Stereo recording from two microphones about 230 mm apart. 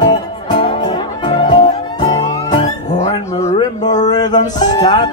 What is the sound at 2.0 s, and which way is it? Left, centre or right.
Music, centre.